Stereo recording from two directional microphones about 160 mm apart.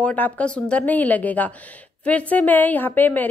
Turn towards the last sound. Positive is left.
turn(degrees=10)  # may be behind; listen again after turning